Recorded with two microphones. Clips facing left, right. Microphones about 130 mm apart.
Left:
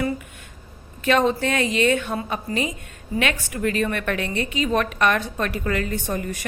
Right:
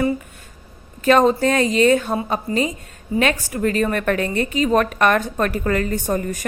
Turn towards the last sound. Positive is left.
turn(degrees=-40)  # may be behind; listen again after turning